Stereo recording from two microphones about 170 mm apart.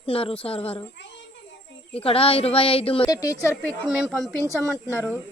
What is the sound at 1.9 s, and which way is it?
Speech, 35° left (ahead or behind).